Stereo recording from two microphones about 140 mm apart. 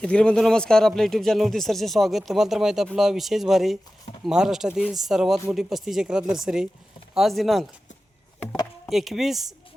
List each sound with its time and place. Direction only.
0.0 s speech: 5° left (ahead or behind)
8.9 s speech: centre (ahead or behind)